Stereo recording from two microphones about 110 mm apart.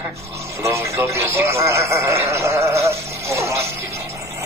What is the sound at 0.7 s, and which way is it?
Speech, 25° right (ahead or behind).